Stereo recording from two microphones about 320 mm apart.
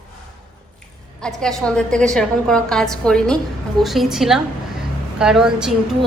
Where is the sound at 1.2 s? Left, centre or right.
Centre.